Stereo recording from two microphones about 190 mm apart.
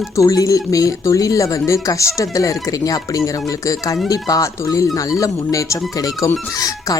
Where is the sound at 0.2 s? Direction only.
15° left (ahead or behind).